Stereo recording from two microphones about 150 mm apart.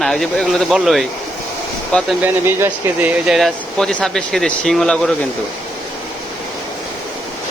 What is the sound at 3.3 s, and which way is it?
Speech, centre (ahead or behind).